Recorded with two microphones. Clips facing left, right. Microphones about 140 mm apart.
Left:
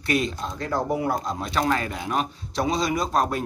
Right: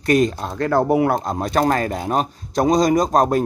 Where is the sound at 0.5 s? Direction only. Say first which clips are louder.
Right 8 dB; 65° right (ahead or behind).